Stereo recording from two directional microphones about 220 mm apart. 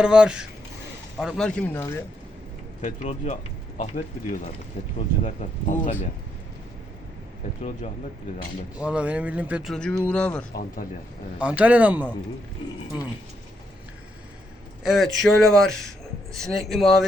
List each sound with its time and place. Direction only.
0.0 s speech: 5° right (ahead or behind)
2.8 s speech: 35° left (ahead or behind)
5.2 s speech: 35° left (ahead or behind)
8.8 s speech: 5° right (ahead or behind)
11.3 s speech: 5° right (ahead or behind)
14.8 s speech: centre (ahead or behind)